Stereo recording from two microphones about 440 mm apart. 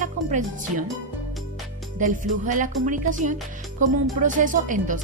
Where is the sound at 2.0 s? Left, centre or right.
Centre.